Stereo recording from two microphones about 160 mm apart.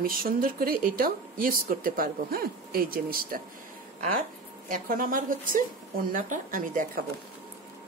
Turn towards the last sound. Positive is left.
turn(degrees=-55)  # may be behind; listen again after turning